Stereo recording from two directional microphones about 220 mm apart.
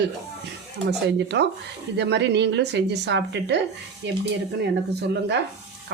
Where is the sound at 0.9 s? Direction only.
50° right (ahead or behind).